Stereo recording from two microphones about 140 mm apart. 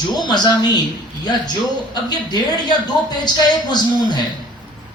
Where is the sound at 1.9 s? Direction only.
30° left (ahead or behind).